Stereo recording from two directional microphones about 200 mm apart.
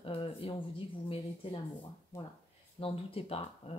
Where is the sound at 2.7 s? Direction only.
30° left (ahead or behind).